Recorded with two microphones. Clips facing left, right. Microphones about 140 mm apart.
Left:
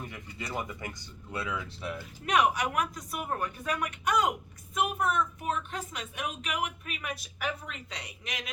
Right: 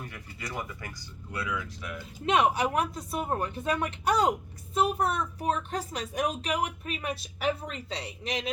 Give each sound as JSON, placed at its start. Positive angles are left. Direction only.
{"t": 0.1, "sound": "speech", "side_deg": 20}
{"t": 2.2, "sound": "speech", "side_deg": -25}